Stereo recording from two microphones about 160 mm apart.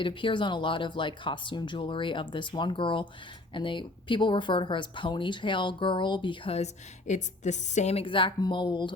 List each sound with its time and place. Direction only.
0.0 s speech: 30° left (ahead or behind)
7.1 s speech: 50° left (ahead or behind); by 9.0 s 30° left (ahead or behind)